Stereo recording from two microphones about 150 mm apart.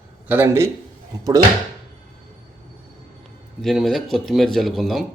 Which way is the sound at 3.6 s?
Centre (ahead or behind).